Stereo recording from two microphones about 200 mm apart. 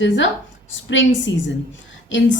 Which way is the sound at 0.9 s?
70° left (ahead or behind).